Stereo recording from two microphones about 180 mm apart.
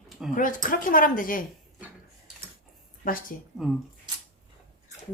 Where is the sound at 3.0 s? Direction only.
50° left (ahead or behind).